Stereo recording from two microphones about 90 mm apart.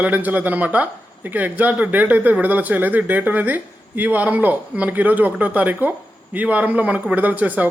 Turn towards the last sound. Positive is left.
turn(degrees=-20)  # may be behind; listen again after turning